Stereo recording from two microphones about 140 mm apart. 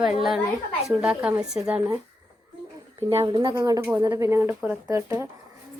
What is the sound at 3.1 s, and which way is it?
Speech, 25° right (ahead or behind).